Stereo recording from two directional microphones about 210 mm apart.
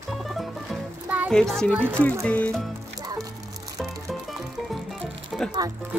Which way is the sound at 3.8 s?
Centre (ahead or behind).